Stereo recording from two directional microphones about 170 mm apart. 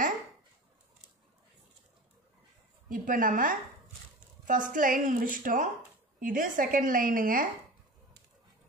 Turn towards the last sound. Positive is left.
turn(degrees=-55)  # may be behind; listen again after turning